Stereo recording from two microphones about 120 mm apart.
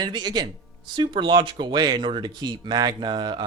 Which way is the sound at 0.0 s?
35° right (ahead or behind).